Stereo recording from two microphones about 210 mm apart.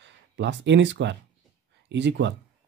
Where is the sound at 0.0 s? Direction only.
60° right (ahead or behind).